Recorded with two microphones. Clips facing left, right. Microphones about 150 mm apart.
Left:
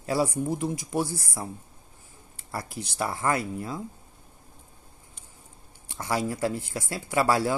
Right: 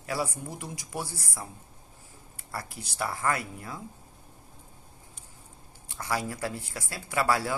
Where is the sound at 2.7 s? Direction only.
25° left (ahead or behind).